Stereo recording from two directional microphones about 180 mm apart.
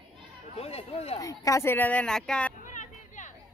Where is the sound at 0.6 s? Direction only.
35° left (ahead or behind).